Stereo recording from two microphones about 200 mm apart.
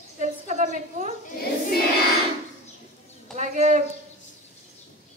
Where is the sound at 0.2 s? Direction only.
40° right (ahead or behind).